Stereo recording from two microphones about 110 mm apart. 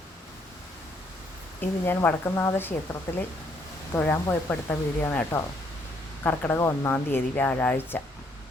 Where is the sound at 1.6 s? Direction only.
20° left (ahead or behind).